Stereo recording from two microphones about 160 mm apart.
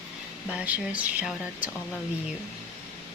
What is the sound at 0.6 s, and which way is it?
Speech, 10° right (ahead or behind).